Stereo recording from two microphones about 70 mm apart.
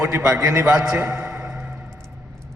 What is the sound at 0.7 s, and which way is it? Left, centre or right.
Speech, centre.